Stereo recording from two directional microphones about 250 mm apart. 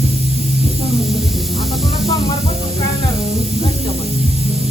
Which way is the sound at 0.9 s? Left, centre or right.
Centre.